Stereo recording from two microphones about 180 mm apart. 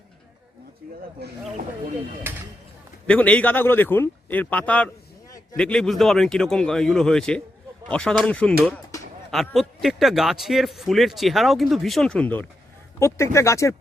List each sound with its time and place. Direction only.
2.3 s speech: 10° right (ahead or behind)
3.1 s a man's voice: 10° left (ahead or behind)